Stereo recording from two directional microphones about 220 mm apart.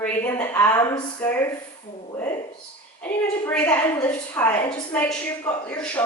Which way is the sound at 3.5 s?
10° left (ahead or behind).